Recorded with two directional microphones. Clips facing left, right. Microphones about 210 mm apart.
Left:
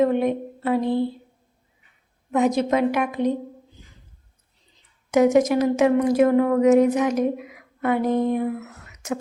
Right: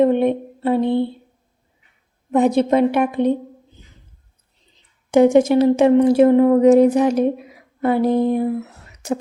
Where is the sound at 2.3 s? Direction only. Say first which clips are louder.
Right 4 dB; 30° right (ahead or behind).